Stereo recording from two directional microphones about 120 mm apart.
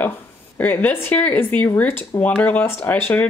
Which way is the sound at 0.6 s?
15° left (ahead or behind).